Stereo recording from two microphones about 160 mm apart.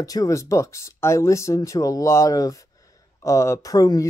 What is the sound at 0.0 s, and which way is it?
Speech, 20° left (ahead or behind).